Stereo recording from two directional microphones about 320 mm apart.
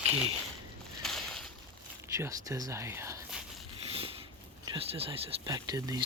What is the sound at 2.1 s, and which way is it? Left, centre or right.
Speech, centre.